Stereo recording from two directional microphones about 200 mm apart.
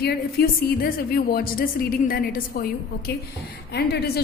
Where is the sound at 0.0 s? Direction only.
50° left (ahead or behind).